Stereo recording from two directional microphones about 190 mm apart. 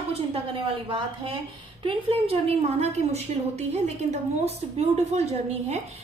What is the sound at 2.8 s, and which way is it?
Music, 35° right (ahead or behind).